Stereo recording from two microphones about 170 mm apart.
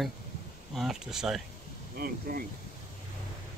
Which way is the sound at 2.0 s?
60° right (ahead or behind).